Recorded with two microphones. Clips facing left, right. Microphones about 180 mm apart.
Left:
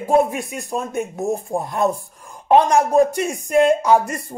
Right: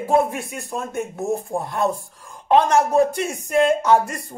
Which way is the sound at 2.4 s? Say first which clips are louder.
Left 2 dB; 15° left (ahead or behind).